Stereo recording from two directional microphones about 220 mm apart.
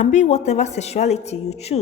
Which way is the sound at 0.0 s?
30° left (ahead or behind).